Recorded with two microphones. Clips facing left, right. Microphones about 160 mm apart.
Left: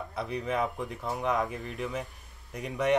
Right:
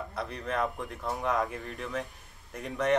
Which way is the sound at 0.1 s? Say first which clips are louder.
Left 4 dB; centre (ahead or behind).